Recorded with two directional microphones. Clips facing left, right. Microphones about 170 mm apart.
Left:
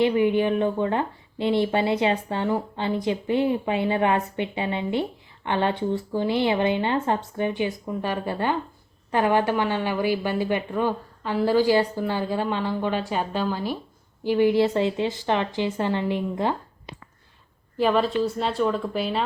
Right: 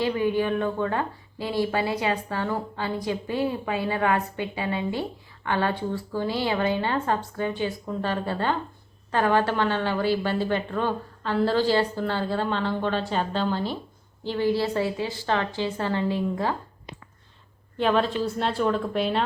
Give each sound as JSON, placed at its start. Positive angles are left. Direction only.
{"t": 0.0, "sound": "a woman's voice", "side_deg": 20}
{"t": 17.7, "sound": "a woman's voice", "side_deg": 5}